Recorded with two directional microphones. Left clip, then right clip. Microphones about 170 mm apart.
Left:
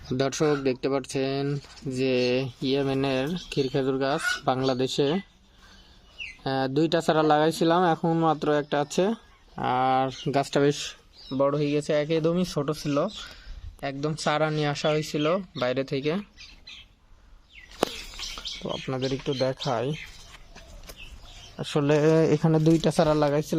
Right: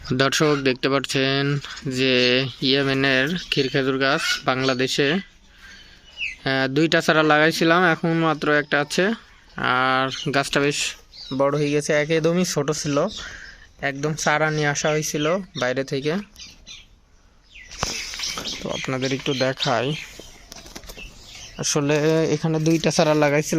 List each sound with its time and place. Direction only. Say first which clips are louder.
0.1 s speech: right 5 dB; centre (ahead or behind)
6.4 s speech: right 4 dB; 25° right (ahead or behind)
6.8 s speech: right 5 dB; 5° left (ahead or behind)
7.1 s speech: right 4 dB; 20° right (ahead or behind)
7.3 s speech: right 5 dB; 5° left (ahead or behind)
7.7 s speech: right 4 dB; 20° right (ahead or behind)
8.1 s speech: right 4 dB; 5° left (ahead or behind)
11.3 s speech: right 4 dB; centre (ahead or behind)
18.9 s speech: right 5 dB; centre (ahead or behind)
21.5 s speech: right 4 dB; 5° left (ahead or behind)
21.8 s speech: even; 20° left (ahead or behind)
22.8 s speech: right 4 dB; 5° left (ahead or behind)